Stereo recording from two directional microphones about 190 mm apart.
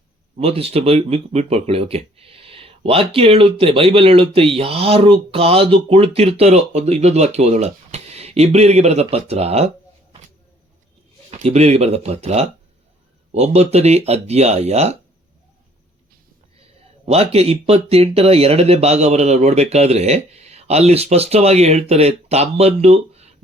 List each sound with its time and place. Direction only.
0.3 s speech: 30° right (ahead or behind)
11.3 s speech: 35° right (ahead or behind)
17.1 s speech: 35° right (ahead or behind)